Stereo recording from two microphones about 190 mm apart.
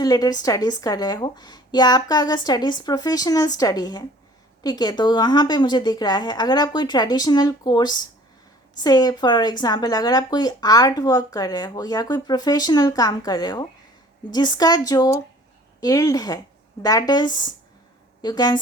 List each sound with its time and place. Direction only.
0.0 s a woman's voice: 20° left (ahead or behind)